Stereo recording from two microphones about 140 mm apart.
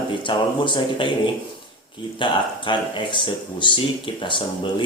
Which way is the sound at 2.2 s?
35° left (ahead or behind).